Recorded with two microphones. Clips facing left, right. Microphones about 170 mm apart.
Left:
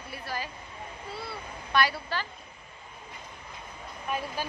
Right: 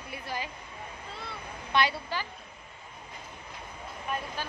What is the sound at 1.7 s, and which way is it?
Speech, 20° right (ahead or behind).